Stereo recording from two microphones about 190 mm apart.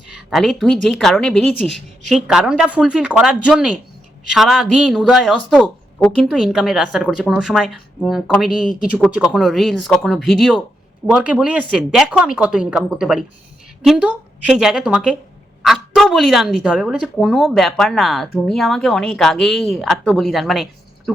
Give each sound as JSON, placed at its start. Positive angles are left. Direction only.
{"t": 0.3, "sound": "speech", "side_deg": 0}